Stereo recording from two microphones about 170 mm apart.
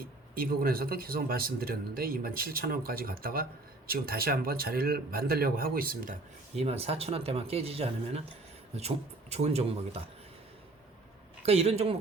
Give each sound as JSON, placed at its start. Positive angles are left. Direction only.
{"t": 0.0, "sound": "speech", "side_deg": -60}
{"t": 6.6, "sound": "speech", "side_deg": -35}
{"t": 9.3, "sound": "speech", "side_deg": -40}
{"t": 11.4, "sound": "speech", "side_deg": -35}